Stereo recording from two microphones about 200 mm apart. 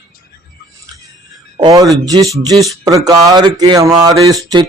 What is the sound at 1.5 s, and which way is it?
Speech, 20° right (ahead or behind).